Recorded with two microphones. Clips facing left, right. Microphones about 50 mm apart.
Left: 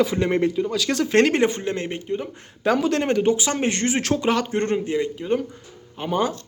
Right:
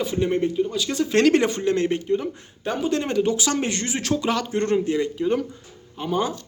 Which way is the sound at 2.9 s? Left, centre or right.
Left.